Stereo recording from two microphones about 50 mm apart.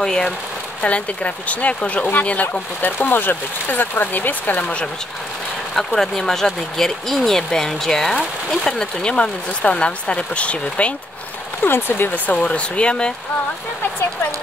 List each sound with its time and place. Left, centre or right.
0.0 s speech: centre; by 2.4 s left
2.8 s speech: left
4.6 s speech: left
5.8 s speech: centre; by 11.0 s left
11.6 s speech: left
12.3 s speech: left